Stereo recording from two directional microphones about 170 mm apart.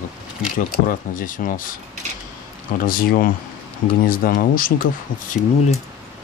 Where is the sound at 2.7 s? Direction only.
55° left (ahead or behind).